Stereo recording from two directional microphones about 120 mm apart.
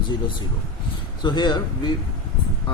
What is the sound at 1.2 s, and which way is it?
Speech, 35° left (ahead or behind).